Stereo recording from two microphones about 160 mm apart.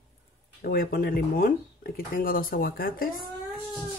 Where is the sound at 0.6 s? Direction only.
65° left (ahead or behind).